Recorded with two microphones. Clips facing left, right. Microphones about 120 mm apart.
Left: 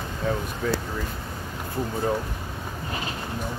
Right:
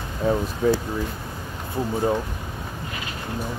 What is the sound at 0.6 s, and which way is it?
Speech, 20° right (ahead or behind).